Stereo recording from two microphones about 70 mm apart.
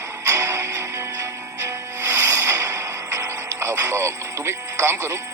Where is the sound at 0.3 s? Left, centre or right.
Right.